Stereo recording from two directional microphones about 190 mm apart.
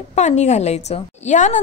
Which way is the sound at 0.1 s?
35° left (ahead or behind).